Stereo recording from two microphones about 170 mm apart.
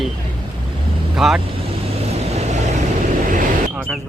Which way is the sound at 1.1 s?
Centre (ahead or behind).